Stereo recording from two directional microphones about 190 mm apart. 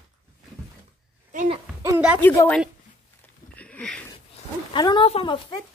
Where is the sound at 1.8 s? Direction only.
10° right (ahead or behind).